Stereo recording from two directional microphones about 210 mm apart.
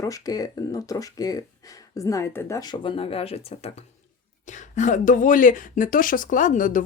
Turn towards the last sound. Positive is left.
turn(degrees=40)  # may be behind; listen again after turning